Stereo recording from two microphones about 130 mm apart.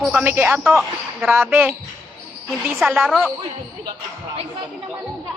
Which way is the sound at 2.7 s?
Centre (ahead or behind).